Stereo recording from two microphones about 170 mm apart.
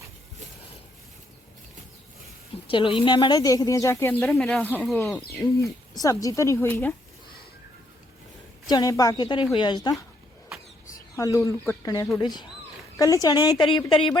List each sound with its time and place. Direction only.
2.6 s speech: 30° left (ahead or behind); by 5.2 s 10° left (ahead or behind)
5.4 s speech: 20° left (ahead or behind)
8.7 s a woman's voice: 20° left (ahead or behind)
11.2 s a woman's voice: 20° left (ahead or behind)